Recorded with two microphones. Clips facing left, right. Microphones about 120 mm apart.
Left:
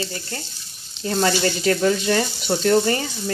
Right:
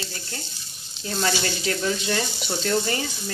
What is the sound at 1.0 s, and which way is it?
Speech, 40° left (ahead or behind).